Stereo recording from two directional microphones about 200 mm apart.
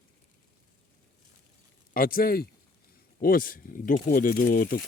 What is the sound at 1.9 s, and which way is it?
Speech, 45° left (ahead or behind).